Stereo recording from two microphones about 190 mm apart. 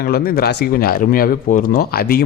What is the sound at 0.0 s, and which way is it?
A man's voice, 55° left (ahead or behind).